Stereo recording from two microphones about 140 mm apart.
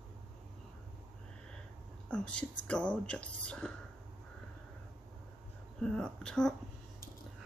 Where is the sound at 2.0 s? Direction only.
5° left (ahead or behind).